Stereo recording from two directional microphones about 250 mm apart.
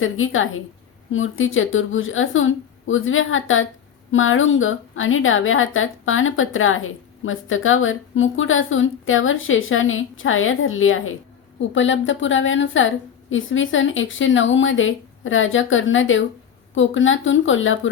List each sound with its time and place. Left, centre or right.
0.0 s a woman's voice: left